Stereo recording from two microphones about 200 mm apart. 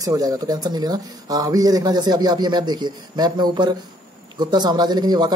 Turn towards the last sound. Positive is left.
turn(degrees=-20)  # may be behind; listen again after turning